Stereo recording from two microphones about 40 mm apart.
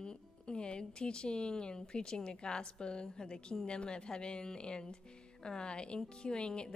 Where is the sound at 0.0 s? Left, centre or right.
Left.